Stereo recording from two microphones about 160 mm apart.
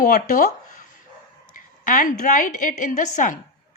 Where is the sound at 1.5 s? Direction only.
55° left (ahead or behind).